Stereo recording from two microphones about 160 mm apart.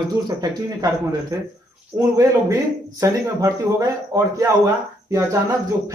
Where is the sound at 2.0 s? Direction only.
25° right (ahead or behind).